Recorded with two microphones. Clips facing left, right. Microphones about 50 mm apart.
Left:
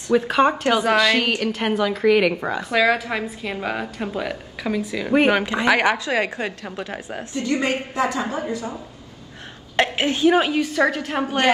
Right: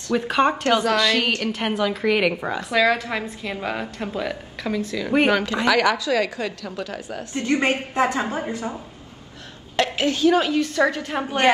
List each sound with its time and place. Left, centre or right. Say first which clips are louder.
0.3 s a woman's voice: right 2 dB; centre
5.3 s a woman's voice: left 1 dB; left
7.3 s a woman's voice: right 1 dB; right
9.8 s a woman's voice: left 1 dB; left; by 11.1 s centre